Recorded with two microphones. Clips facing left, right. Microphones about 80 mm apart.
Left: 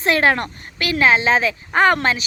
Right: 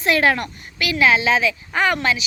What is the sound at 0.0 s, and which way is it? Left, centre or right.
Speech, left.